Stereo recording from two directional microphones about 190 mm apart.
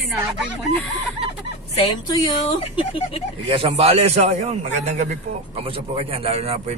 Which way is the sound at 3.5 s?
30° right (ahead or behind).